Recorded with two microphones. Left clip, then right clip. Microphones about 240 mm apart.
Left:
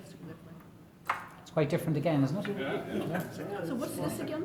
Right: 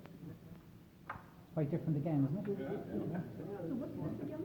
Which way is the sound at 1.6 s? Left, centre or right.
Left.